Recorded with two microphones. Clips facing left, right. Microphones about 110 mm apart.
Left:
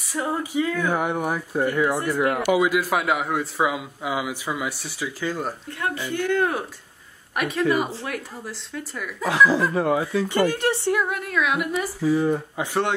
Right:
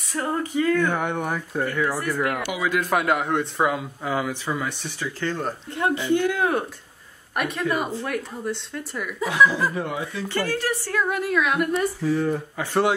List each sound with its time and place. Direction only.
0.1 s speech: 5° left (ahead or behind); by 2.6 s 25° left (ahead or behind)
2.6 s a man's voice: 5° left (ahead or behind)
5.7 s speech: 25° right (ahead or behind)
6.3 s a man's voice: centre (ahead or behind)
9.8 s speech: 35° left (ahead or behind)
10.2 s speech: 15° left (ahead or behind)
11.1 s a man's voice: centre (ahead or behind)